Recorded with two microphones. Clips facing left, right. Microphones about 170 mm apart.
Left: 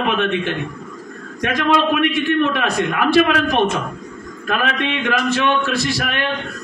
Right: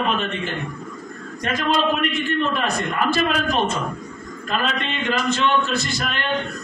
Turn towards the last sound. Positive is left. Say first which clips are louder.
# left 4 dB
turn(degrees=75)  # may be behind; listen again after turning